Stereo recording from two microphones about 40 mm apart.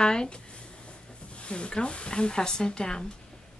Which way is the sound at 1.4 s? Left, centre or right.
Left.